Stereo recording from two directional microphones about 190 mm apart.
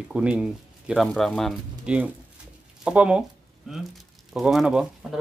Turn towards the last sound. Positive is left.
turn(degrees=0)  # may be behind; listen again after turning